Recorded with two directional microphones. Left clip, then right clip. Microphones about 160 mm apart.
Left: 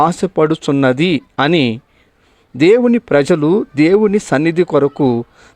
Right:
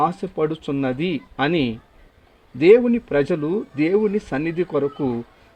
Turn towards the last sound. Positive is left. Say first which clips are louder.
# left 9 dB
turn(degrees=40)  # may be behind; listen again after turning